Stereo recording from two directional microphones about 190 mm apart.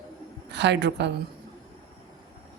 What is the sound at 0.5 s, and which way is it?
Speech, 65° right (ahead or behind).